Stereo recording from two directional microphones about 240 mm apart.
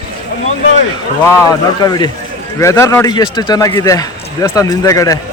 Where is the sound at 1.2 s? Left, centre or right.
Centre.